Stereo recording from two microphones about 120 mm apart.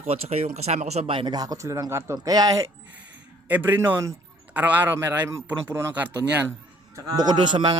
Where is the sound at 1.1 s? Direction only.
35° right (ahead or behind).